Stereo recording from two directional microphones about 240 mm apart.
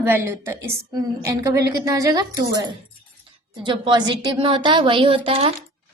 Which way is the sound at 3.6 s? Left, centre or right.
Centre.